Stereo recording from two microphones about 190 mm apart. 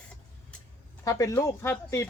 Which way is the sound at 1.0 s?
15° left (ahead or behind).